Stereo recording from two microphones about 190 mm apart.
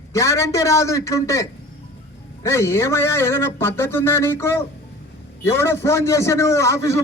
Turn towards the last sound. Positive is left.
turn(degrees=15)  # may be behind; listen again after turning